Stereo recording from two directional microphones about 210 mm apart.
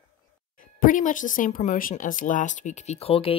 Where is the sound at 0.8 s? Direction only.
40° left (ahead or behind).